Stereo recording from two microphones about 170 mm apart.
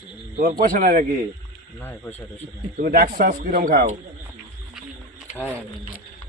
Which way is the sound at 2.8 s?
60° right (ahead or behind).